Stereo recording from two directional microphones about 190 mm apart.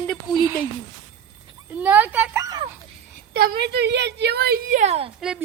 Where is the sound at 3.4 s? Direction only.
55° right (ahead or behind); by 5.1 s 35° right (ahead or behind).